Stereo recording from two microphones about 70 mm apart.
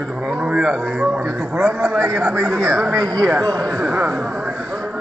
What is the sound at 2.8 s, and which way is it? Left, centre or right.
Speech, right.